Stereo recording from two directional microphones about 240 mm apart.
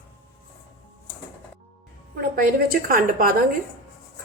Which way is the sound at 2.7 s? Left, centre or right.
Right.